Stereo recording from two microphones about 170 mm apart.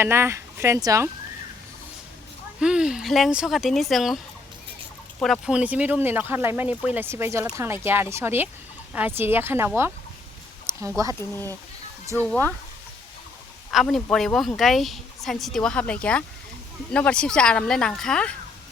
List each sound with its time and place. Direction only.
0.0 s speech: 15° right (ahead or behind)
2.6 s a woman's voice: 5° right (ahead or behind)
5.2 s speech: centre (ahead or behind); by 11.1 s 20° right (ahead or behind)
11.1 s a woman's voice: 15° left (ahead or behind)
13.7 s a woman's voice: centre (ahead or behind)